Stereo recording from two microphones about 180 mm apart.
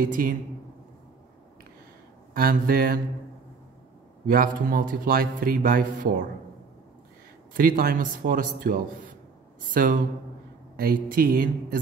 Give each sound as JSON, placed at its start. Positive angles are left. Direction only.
{"t": 0.0, "sound": "a man's voice", "side_deg": -55}
{"t": 2.3, "sound": "speech", "side_deg": -55}
{"t": 4.3, "sound": "a man's voice", "side_deg": -55}
{"t": 7.5, "sound": "a man's voice", "side_deg": -55}